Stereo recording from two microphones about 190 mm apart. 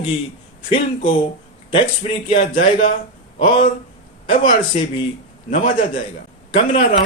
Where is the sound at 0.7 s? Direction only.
45° left (ahead or behind).